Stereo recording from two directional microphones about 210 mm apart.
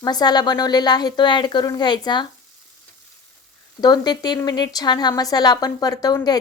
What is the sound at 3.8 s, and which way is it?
A woman's voice, 20° left (ahead or behind).